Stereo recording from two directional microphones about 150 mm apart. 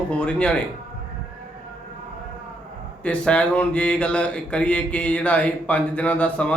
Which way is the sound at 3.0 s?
5° left (ahead or behind).